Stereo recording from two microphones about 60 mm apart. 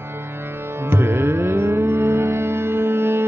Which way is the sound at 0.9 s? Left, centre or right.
Right.